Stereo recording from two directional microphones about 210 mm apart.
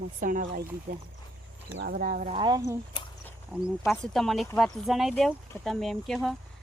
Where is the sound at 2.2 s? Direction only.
20° right (ahead or behind).